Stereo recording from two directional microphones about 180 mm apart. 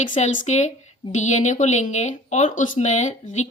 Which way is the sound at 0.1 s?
40° left (ahead or behind).